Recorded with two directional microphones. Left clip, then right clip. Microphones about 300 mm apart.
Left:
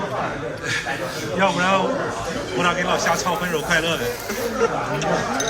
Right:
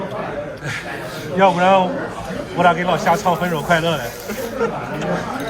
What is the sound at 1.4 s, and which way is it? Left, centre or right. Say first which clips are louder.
Speech: right 6 dB; right.